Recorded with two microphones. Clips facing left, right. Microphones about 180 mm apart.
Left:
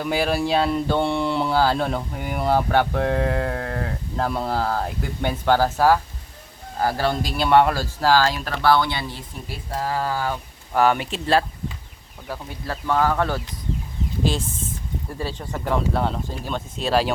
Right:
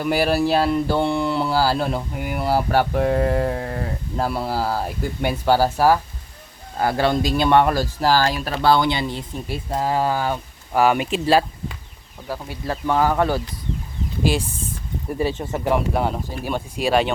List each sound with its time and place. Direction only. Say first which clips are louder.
0.0 s speech: right 3 dB; 5° right (ahead or behind)
12.6 s speech: right 2 dB; 15° right (ahead or behind)
15.2 s speech: right 7 dB; 20° right (ahead or behind)